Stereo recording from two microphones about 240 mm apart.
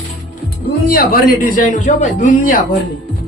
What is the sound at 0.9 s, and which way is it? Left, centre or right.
Speech, left.